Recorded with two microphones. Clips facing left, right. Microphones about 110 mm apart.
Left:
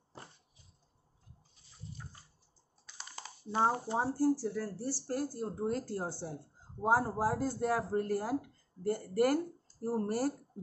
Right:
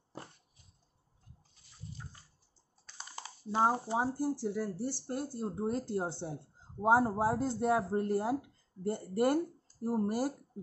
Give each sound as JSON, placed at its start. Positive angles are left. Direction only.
{"t": 3.6, "sound": "speech", "side_deg": -10}